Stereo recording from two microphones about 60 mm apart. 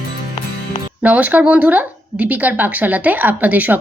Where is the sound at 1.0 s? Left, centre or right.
Right.